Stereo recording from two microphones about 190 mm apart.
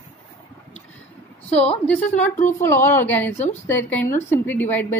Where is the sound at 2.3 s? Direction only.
40° left (ahead or behind).